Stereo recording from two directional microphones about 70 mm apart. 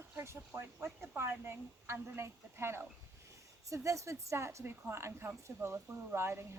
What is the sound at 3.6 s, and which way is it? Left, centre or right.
A woman's voice, right.